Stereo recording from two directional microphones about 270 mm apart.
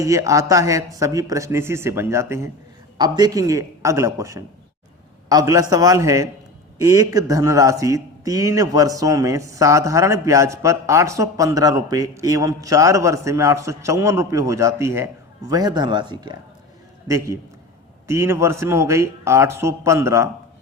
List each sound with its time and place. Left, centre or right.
0.0 s a man's voice: centre